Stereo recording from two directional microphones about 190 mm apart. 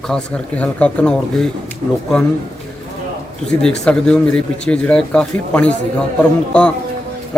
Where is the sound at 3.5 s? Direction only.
5° left (ahead or behind).